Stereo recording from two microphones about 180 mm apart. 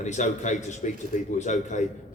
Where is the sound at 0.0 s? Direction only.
40° left (ahead or behind).